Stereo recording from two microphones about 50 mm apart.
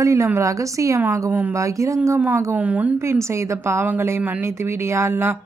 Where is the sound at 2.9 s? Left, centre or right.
Right.